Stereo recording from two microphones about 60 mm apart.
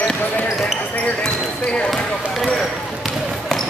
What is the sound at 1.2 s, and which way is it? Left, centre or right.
Basketball bounce, centre.